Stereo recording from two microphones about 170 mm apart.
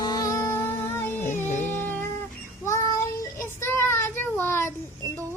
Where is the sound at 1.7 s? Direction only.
10° left (ahead or behind).